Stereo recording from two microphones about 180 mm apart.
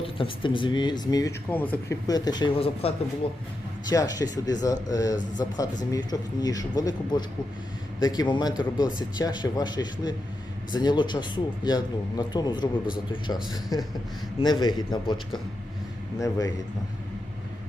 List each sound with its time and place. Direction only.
0.0 s a man's voice: 30° left (ahead or behind)